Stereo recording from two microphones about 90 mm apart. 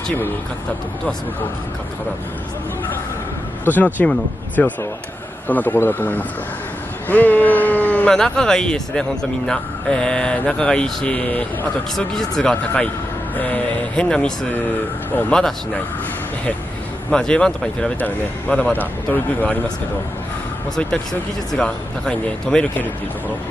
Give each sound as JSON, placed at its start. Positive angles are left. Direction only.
{"t": 3.6, "sound": "speech", "side_deg": 20}
{"t": 17.1, "sound": "speech", "side_deg": 10}
{"t": 20.7, "sound": "speech", "side_deg": 5}